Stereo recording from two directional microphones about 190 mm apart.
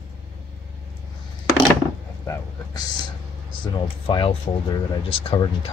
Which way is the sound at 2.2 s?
15° left (ahead or behind).